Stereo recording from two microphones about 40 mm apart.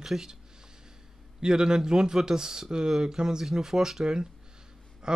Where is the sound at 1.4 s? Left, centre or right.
Centre.